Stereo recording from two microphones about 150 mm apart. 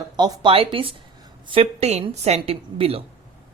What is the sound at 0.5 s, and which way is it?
Speech, 35° right (ahead or behind).